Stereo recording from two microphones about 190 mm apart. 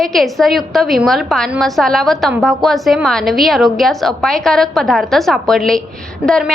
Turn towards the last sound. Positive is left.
turn(degrees=0)  # may be behind; listen again after turning